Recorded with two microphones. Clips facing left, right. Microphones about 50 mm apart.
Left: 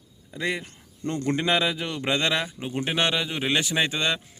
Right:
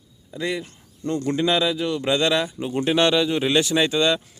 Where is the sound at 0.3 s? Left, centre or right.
Left.